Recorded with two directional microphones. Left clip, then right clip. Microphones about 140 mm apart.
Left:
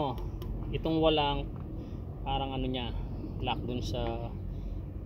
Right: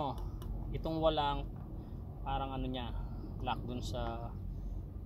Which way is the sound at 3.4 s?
25° right (ahead or behind).